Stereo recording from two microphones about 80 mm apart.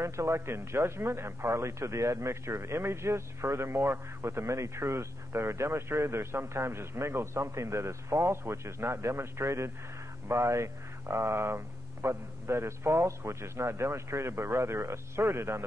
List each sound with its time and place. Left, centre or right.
0.0 s speech: right